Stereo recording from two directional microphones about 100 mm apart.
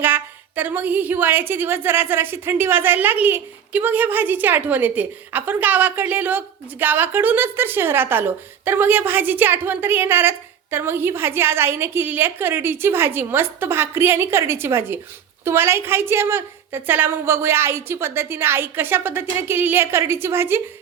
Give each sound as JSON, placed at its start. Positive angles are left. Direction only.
{"t": 0.0, "sound": "a woman's voice", "side_deg": -20}